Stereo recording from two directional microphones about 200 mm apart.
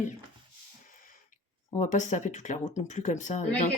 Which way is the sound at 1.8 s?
35° left (ahead or behind).